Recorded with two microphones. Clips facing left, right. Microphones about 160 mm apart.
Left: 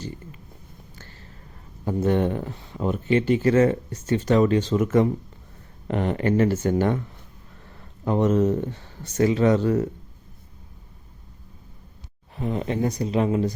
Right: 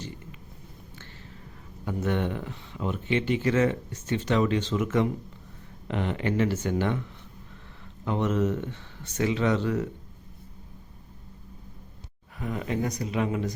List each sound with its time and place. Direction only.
1.8 s speech: 35° left (ahead or behind)
8.0 s speech: 40° left (ahead or behind)
12.4 s speech: 30° left (ahead or behind)